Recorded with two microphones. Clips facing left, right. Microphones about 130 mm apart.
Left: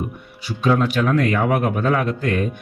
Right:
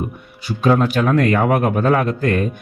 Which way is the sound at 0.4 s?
50° right (ahead or behind).